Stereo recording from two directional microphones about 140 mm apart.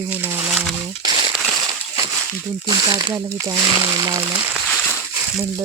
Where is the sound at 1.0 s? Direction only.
35° right (ahead or behind).